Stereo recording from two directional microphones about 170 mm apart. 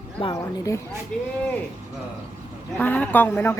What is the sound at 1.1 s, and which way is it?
Speech, 5° left (ahead or behind).